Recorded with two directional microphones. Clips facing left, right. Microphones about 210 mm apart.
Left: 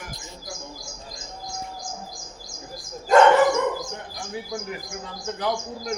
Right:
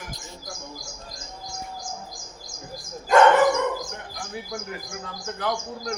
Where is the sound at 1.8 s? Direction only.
Centre (ahead or behind).